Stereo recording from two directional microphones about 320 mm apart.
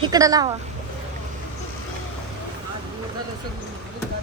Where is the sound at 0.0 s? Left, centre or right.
Centre.